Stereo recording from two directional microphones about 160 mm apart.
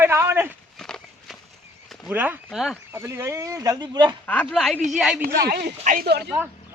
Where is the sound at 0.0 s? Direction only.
15° right (ahead or behind).